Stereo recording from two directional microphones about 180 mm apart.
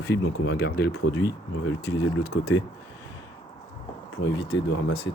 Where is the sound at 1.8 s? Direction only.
75° left (ahead or behind).